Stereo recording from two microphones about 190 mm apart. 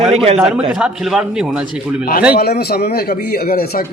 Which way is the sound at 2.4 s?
55° left (ahead or behind).